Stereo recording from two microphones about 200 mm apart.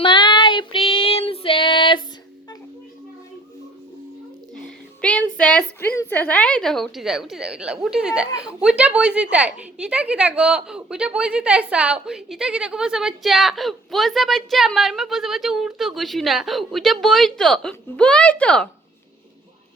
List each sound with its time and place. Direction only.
0.0 s child singing: 25° left (ahead or behind)
4.5 s a sound: 5° left (ahead or behind)
5.4 s a woman's voice: 10° left (ahead or behind)